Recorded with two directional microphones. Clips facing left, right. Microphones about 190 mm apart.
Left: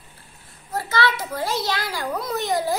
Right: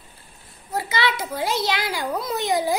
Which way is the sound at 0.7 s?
20° right (ahead or behind).